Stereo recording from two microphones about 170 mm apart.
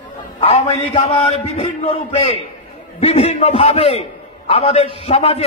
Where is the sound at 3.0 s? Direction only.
35° left (ahead or behind).